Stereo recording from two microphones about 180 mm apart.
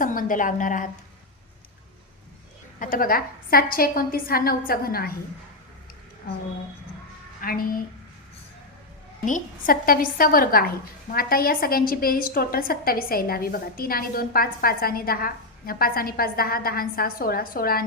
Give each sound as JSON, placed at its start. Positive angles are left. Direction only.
{"t": 0.0, "sound": "a woman's voice", "side_deg": 50}
{"t": 2.7, "sound": "a woman's voice", "side_deg": 50}
{"t": 7.4, "sound": "a woman's voice", "side_deg": 55}
{"t": 9.2, "sound": "a woman's voice", "side_deg": 50}